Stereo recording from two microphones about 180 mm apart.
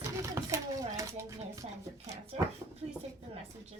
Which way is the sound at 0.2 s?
15° right (ahead or behind).